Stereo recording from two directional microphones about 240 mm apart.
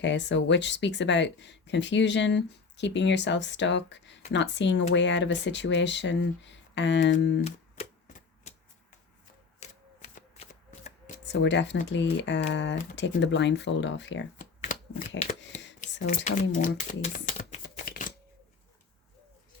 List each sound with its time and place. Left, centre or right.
0.0 s speech: left
7.4 s a sound: left
9.6 s shuffling cards: left
11.3 s speech: left
14.3 s shuffling cards: left
15.3 s speech: left
15.8 s shuffling cards: left